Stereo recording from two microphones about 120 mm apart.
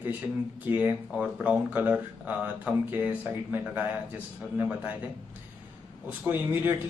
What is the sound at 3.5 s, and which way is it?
Speech, 15° right (ahead or behind).